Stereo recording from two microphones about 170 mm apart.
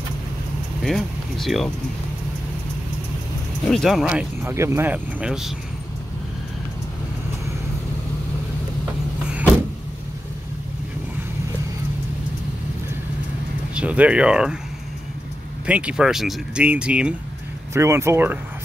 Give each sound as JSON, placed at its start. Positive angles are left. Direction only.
{"t": 0.8, "sound": "speech", "side_deg": 0}
{"t": 3.6, "sound": "speech", "side_deg": 0}
{"t": 13.7, "sound": "speech", "side_deg": -10}
{"t": 15.6, "sound": "speech", "side_deg": -5}